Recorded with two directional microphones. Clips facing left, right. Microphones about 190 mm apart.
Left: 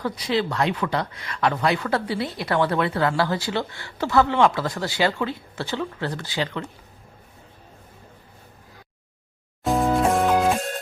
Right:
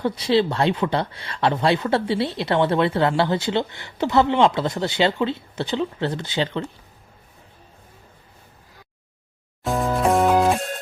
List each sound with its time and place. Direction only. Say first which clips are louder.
0.0 s speech: right 5 dB; 30° right (ahead or behind)
9.6 s music: even; centre (ahead or behind)